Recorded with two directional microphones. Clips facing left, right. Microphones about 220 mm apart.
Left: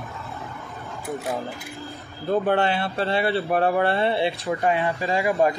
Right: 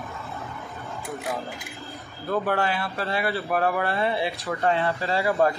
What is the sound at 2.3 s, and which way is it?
Speech, 25° left (ahead or behind).